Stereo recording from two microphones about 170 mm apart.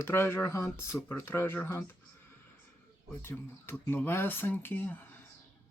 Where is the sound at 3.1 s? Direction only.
10° left (ahead or behind).